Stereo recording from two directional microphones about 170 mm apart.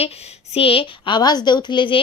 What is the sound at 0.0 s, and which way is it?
A woman's voice, 40° left (ahead or behind).